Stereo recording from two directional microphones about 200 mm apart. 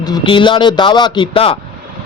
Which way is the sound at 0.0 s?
20° left (ahead or behind).